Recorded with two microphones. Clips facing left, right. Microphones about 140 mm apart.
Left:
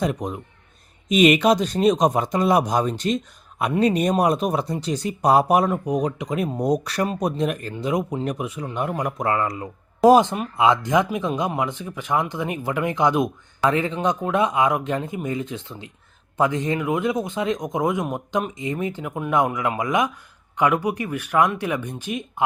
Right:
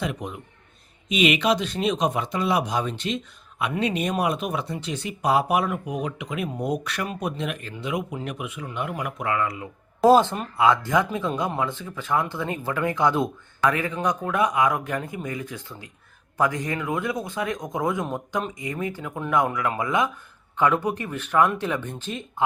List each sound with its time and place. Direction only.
0.0 s speech: 40° left (ahead or behind)
10.1 s speech: 15° left (ahead or behind)